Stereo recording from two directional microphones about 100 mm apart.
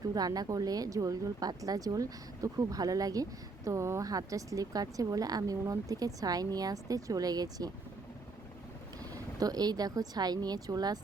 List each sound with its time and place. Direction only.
0.1 s speech: 40° right (ahead or behind)
9.1 s speech: 40° right (ahead or behind)